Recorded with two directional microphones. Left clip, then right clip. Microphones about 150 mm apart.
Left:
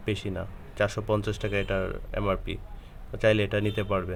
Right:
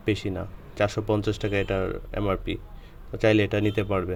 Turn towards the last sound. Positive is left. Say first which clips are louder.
# right 3 dB
turn(degrees=-20)  # may be behind; listen again after turning